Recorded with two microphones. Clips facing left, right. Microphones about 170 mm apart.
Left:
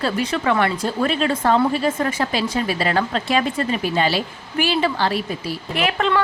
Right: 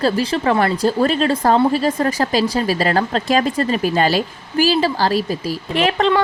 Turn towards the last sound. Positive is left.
turn(degrees=-35)  # may be behind; listen again after turning